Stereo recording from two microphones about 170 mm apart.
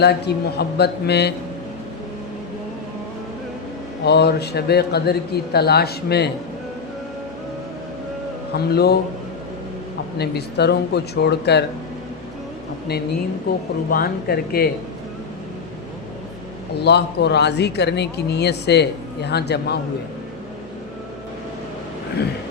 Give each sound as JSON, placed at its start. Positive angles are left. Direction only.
{"t": 0.0, "sound": "a man's voice", "side_deg": 75}
{"t": 4.0, "sound": "a man's voice", "side_deg": 75}
{"t": 8.5, "sound": "a man's voice", "side_deg": 70}
{"t": 10.2, "sound": "a man's voice", "side_deg": 75}
{"t": 13.5, "sound": "a man's voice", "side_deg": 65}
{"t": 16.8, "sound": "speech", "side_deg": 80}